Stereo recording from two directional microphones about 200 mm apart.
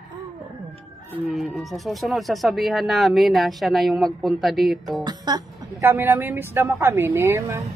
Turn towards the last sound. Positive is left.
turn(degrees=-15)  # may be behind; listen again after turning